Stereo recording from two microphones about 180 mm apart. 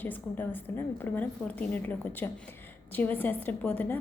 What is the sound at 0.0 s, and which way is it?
A woman's voice, 10° left (ahead or behind).